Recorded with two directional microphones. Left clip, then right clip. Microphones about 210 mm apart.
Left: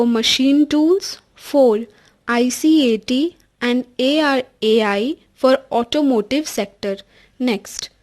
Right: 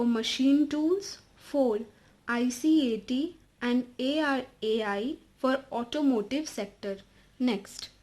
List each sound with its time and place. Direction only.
0.0 s a woman's voice: 45° left (ahead or behind)
7.3 s a woman's voice: 35° left (ahead or behind)